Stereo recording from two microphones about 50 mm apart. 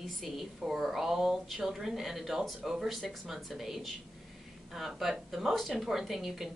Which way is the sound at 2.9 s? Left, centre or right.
Centre.